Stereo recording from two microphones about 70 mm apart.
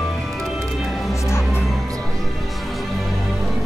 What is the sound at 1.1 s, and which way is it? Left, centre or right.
Music, left.